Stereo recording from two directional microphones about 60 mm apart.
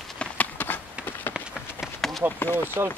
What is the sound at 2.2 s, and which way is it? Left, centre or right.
Speech, right.